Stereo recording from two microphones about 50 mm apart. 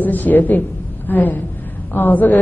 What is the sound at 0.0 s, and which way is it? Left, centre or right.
A woman's voice, left.